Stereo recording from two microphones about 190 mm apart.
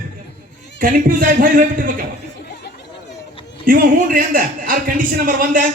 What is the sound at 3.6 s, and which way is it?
A man's voice, 45° right (ahead or behind).